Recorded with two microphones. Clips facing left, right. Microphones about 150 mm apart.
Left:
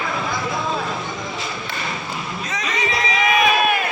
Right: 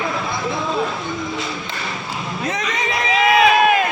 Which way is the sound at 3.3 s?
90° right.